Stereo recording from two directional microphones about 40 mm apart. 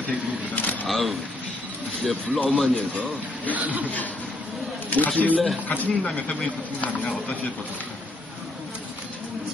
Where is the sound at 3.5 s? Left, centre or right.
Right.